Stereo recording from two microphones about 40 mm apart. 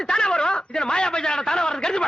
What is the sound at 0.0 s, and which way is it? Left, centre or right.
A man's voice, left.